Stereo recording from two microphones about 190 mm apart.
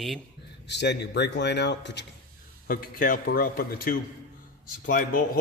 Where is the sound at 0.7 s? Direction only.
65° left (ahead or behind).